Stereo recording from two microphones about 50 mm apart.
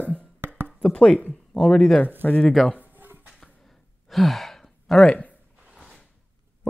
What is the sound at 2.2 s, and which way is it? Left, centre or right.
Speech, left.